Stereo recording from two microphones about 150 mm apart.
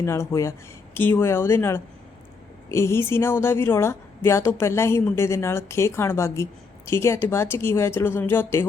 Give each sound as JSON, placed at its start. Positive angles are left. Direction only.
{"t": 0.0, "sound": "a woman's voice", "side_deg": 20}